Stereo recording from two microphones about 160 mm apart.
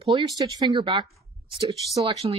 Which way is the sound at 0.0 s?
25° right (ahead or behind).